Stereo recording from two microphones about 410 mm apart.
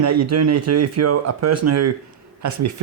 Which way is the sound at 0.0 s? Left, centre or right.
Right.